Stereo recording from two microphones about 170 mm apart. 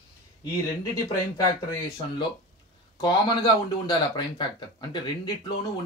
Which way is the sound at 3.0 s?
25° left (ahead or behind).